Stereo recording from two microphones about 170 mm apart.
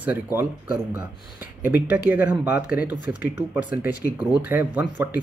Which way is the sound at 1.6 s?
10° right (ahead or behind).